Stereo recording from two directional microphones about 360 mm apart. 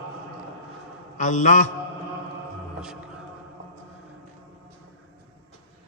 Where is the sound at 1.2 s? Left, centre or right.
Left.